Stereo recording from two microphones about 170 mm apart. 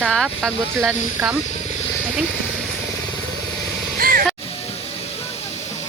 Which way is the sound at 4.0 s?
55° right (ahead or behind).